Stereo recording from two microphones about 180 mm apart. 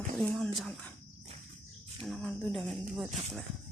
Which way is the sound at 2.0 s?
Centre (ahead or behind).